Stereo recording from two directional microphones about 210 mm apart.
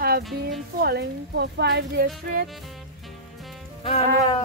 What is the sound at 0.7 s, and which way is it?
A woman's voice, 50° right (ahead or behind).